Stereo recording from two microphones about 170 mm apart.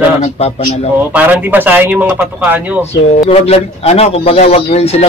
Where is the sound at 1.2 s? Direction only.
10° right (ahead or behind).